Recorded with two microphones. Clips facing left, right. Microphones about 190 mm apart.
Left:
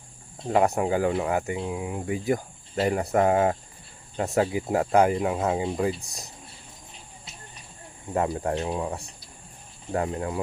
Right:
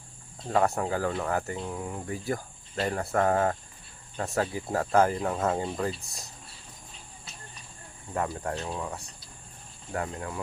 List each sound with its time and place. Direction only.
0.4 s speech: 20° left (ahead or behind)
8.1 s speech: 20° left (ahead or behind)